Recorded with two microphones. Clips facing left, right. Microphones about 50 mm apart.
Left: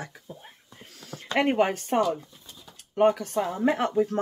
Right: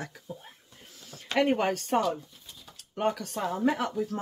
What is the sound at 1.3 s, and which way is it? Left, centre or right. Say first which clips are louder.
Speech: left 2 dB; left.